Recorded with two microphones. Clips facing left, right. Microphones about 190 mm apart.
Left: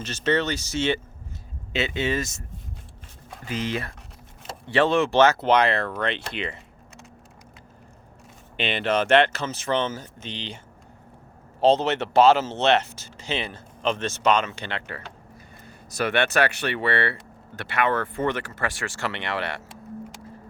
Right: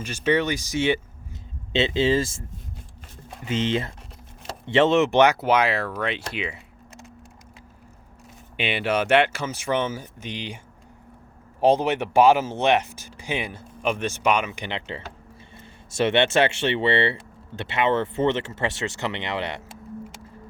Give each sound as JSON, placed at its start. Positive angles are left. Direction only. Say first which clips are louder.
{"t": 0.0, "sound": "speech", "louder": "right 1 dB", "side_deg": -10}
{"t": 1.7, "sound": "speech", "louder": "right 5 dB", "side_deg": -30}
{"t": 3.4, "sound": "speech", "louder": "right 4 dB", "side_deg": -25}
{"t": 8.5, "sound": "speech", "louder": "even", "side_deg": -10}
{"t": 11.6, "sound": "speech", "louder": "even", "side_deg": -10}